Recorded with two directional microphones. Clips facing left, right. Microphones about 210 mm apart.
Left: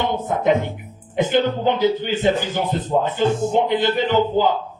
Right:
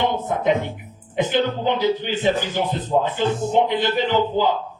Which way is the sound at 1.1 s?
50° left (ahead or behind).